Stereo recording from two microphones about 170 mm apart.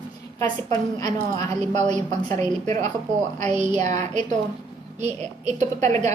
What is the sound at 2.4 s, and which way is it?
A woman's voice, 45° right (ahead or behind).